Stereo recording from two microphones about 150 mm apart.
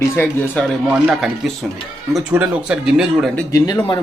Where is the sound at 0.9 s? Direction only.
5° right (ahead or behind).